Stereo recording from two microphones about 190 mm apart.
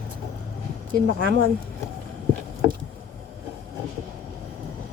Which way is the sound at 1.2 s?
85° right.